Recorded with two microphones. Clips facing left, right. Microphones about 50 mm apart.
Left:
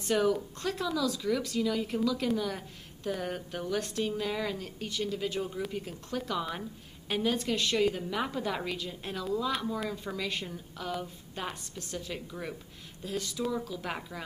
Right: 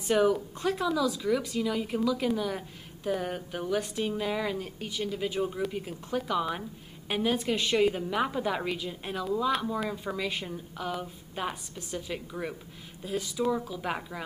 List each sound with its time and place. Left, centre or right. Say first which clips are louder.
0.0 s speech: right 3 dB; centre